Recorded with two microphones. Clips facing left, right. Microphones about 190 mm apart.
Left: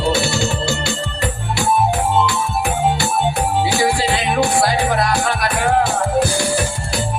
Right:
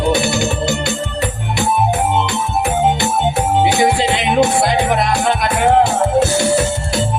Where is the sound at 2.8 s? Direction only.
20° right (ahead or behind).